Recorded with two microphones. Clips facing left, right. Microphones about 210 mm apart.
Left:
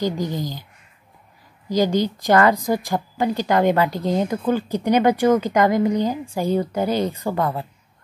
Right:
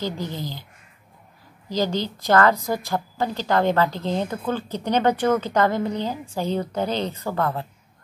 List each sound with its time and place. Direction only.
0.0 s a woman's voice: 15° left (ahead or behind)
1.7 s a woman's voice: 15° left (ahead or behind)